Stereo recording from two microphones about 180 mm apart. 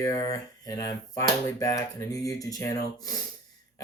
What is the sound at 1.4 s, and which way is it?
Speech, 20° left (ahead or behind).